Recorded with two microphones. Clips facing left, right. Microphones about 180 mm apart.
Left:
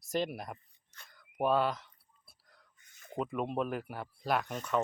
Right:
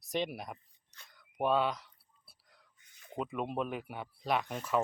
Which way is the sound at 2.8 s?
45° left (ahead or behind).